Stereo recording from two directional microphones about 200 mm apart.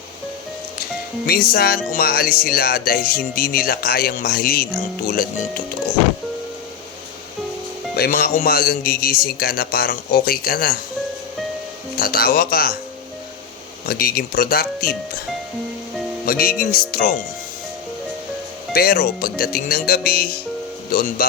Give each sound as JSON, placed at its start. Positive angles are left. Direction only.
{"t": 1.3, "sound": "a man's voice", "side_deg": 50}
{"t": 7.9, "sound": "a man's voice", "side_deg": 50}
{"t": 11.9, "sound": "a man's voice", "side_deg": 50}
{"t": 13.8, "sound": "a man's voice", "side_deg": 50}
{"t": 16.2, "sound": "a man's voice", "side_deg": 50}
{"t": 18.7, "sound": "a man's voice", "side_deg": 50}